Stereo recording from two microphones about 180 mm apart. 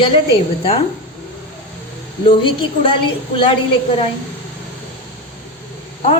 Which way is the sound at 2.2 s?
30° left (ahead or behind).